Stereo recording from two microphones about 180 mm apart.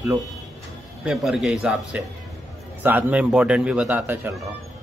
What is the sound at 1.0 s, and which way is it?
A man's voice, 5° right (ahead or behind).